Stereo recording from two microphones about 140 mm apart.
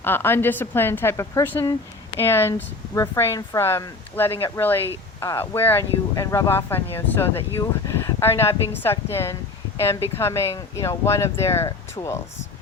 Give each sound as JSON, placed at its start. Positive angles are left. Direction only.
{"t": 0.0, "sound": "speech", "side_deg": 15}